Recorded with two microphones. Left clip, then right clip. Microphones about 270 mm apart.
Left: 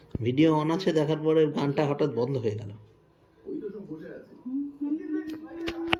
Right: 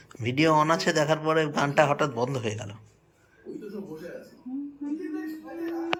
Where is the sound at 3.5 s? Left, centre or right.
Right.